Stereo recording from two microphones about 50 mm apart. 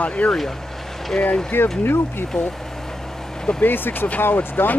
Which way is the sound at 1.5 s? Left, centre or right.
Left.